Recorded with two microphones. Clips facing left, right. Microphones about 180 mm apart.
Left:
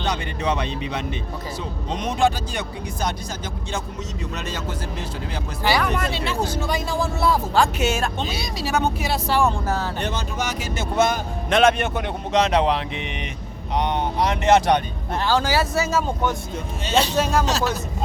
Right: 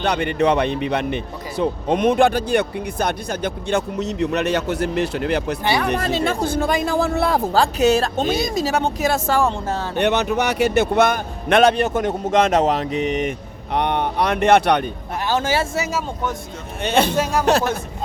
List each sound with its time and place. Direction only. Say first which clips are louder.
0.0 s speech: right 7 dB; 60° right (ahead or behind)
5.6 s speech: left 2 dB; 25° right (ahead or behind)
6.0 s speech: right 4 dB; 45° right (ahead or behind); by 7.4 s 60° right (ahead or behind)
7.5 s speech: right 4 dB; 35° right (ahead or behind)
8.2 s speech: right 7 dB; 50° right (ahead or behind)
9.5 s speech: even; 25° right (ahead or behind)
10.0 s speech: right 8 dB; 65° right (ahead or behind)
11.6 s speech: right 1 dB; 40° right (ahead or behind)
13.7 s speech: right 2 dB; 60° right (ahead or behind)
15.2 s speech: right 1 dB; 20° right (ahead or behind)
15.9 s speech: left 2 dB; 5° right (ahead or behind)
16.8 s speech: right 3 dB; 55° right (ahead or behind)